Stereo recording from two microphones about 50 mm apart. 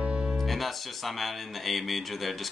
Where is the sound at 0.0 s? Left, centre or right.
Right.